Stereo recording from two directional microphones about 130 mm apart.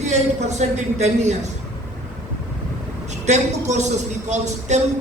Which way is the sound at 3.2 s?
60° right (ahead or behind).